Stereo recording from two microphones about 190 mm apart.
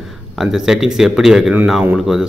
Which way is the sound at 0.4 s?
5° right (ahead or behind).